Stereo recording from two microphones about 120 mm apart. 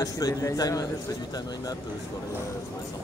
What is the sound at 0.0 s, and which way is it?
A man's voice, 30° left (ahead or behind).